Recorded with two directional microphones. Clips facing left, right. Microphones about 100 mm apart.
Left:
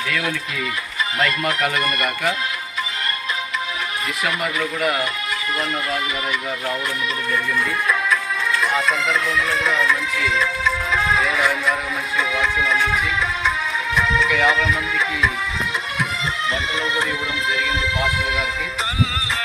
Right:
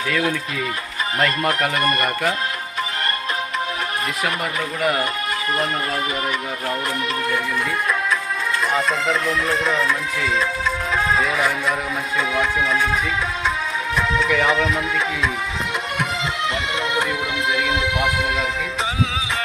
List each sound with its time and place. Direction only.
0.1 s speech: 35° right (ahead or behind)
4.8 s speech: 30° right (ahead or behind)
9.0 s speech: 40° right (ahead or behind)
9.6 s music: 25° right (ahead or behind)
11.3 s a sound: 15° right (ahead or behind)
12.3 s speech: 45° right (ahead or behind)
12.7 s a sound: 15° right (ahead or behind)
13.9 s music: 40° right (ahead or behind)
14.4 s speech: 45° right (ahead or behind)
16.7 s speech: 55° right (ahead or behind)